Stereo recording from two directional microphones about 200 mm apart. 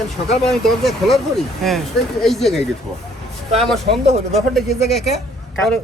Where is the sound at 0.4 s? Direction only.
Centre (ahead or behind).